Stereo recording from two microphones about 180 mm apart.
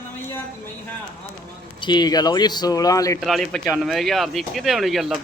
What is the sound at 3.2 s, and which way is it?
Speech, centre (ahead or behind).